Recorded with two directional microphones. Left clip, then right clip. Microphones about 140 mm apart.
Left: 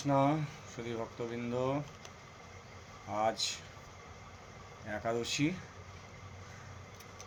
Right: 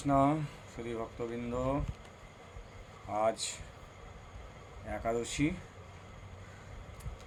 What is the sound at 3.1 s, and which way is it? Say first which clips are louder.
Speech: right 1 dB; 5° right (ahead or behind).